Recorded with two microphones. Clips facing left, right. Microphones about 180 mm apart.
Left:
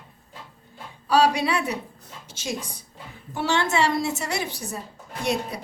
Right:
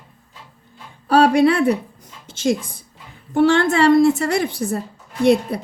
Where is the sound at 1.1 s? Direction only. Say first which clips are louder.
Right 7 dB; 55° right (ahead or behind).